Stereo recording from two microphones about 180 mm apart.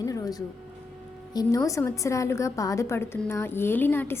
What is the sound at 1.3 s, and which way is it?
A woman's voice, 20° left (ahead or behind).